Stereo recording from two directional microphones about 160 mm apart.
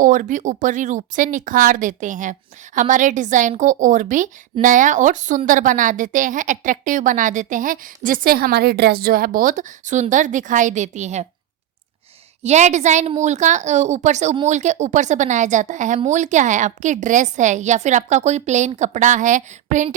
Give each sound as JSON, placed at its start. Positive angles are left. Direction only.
{"t": 0.0, "sound": "a woman's voice", "side_deg": -55}
{"t": 12.4, "sound": "a woman's voice", "side_deg": -45}